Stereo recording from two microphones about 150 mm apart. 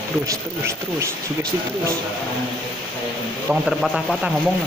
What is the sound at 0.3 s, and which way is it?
Speech, 20° right (ahead or behind).